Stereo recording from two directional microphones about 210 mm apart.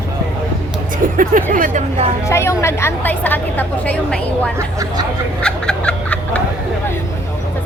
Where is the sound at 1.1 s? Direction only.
40° right (ahead or behind).